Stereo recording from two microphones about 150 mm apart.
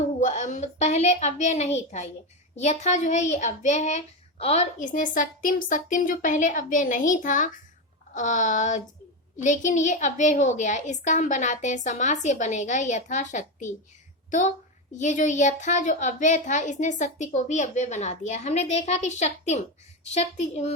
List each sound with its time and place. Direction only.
0.2 s a woman's voice: 55° left (ahead or behind)